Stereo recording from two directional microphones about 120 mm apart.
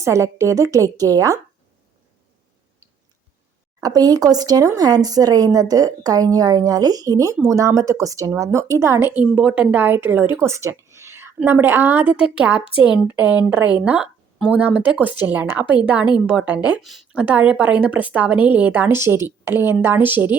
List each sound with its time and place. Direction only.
0.0 s speech: 25° right (ahead or behind)
3.8 s a woman's voice: 30° right (ahead or behind); by 17.2 s centre (ahead or behind)
17.2 s a woman's voice: 10° right (ahead or behind)